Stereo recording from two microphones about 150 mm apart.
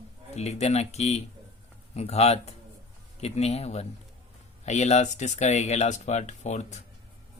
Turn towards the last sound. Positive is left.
turn(degrees=50)  # may be behind; listen again after turning